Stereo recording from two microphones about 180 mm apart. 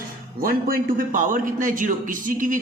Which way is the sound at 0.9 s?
50° right (ahead or behind).